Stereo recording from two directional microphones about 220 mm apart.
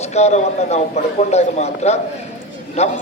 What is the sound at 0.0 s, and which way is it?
A man's voice, 30° left (ahead or behind).